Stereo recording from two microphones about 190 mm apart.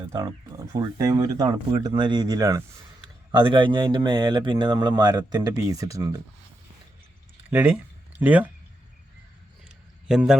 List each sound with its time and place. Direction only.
0.7 s speech: 20° right (ahead or behind)
7.5 s speech: 10° right (ahead or behind)
10.1 s a man's voice: 5° right (ahead or behind)